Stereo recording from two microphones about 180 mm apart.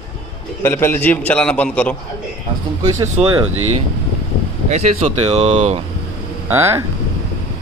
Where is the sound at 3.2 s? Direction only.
30° right (ahead or behind).